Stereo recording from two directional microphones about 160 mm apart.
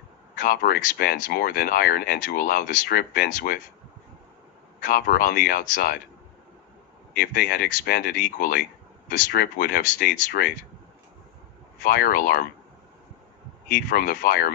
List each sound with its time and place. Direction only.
0.4 s speech: 65° left (ahead or behind)
4.8 s speech: 65° left (ahead or behind)
7.2 s speech: 70° left (ahead or behind)
11.8 s speech: 70° left (ahead or behind)
13.7 s speech: 70° left (ahead or behind)